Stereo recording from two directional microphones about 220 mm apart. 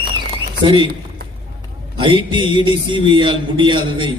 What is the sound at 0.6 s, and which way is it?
Speech, 20° right (ahead or behind).